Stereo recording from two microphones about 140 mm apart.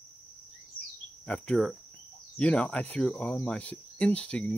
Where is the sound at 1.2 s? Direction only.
5° left (ahead or behind).